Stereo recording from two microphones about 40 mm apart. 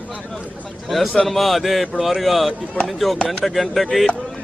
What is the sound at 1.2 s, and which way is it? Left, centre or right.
A man's voice, centre.